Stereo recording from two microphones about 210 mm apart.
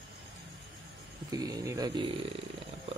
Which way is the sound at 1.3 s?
15° right (ahead or behind).